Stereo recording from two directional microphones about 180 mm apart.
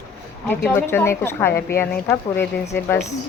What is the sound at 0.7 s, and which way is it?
Speech, 15° left (ahead or behind).